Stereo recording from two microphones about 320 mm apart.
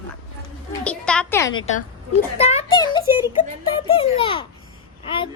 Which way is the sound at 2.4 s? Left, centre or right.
Centre.